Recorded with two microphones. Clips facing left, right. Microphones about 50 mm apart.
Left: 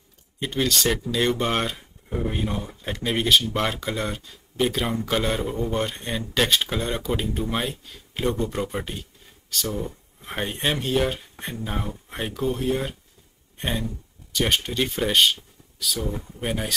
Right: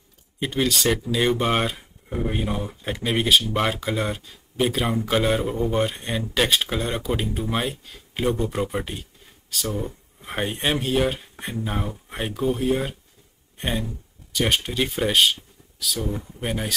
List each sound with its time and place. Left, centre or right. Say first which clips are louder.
0.4 s speech: right 1 dB; centre